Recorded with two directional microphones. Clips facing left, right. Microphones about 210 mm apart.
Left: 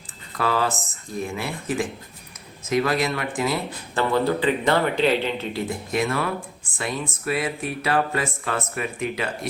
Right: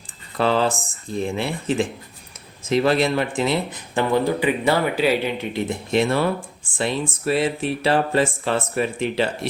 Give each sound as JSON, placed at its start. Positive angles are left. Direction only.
{"t": 0.3, "sound": "speech", "side_deg": -25}
{"t": 3.9, "sound": "a man's voice", "side_deg": -15}